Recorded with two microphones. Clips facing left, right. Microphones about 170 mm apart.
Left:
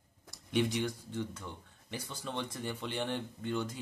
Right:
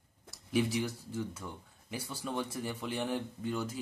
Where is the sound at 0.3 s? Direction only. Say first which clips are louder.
Right 1 dB; 5° right (ahead or behind).